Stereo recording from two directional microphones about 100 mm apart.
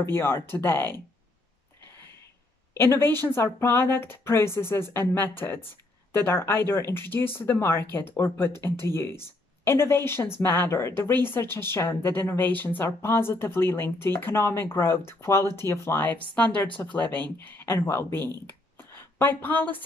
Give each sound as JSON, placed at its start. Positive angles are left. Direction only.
{"t": 0.0, "sound": "speech", "side_deg": 25}
{"t": 2.7, "sound": "speech", "side_deg": 25}
{"t": 18.8, "sound": "a sound", "side_deg": 20}